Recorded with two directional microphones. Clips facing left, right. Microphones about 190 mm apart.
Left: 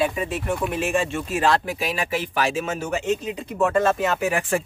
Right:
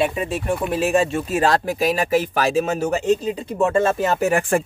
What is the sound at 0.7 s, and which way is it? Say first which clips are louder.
Speech: right 5 dB; 35° right (ahead or behind).